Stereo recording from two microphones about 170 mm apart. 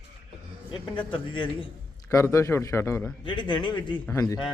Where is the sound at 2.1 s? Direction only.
15° left (ahead or behind).